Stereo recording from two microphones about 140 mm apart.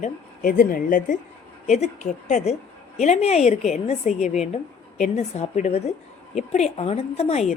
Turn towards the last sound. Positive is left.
turn(degrees=50)  # may be behind; listen again after turning